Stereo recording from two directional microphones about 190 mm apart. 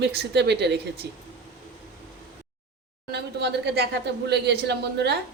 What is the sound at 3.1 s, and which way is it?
A woman's voice, 60° right (ahead or behind).